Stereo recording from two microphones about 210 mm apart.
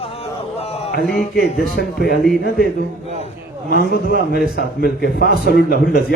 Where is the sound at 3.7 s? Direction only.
50° left (ahead or behind).